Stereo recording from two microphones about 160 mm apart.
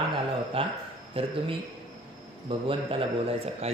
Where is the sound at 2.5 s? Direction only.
35° right (ahead or behind).